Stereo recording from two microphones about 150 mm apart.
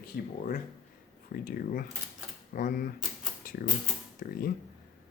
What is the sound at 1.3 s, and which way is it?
Speech, 75° left (ahead or behind).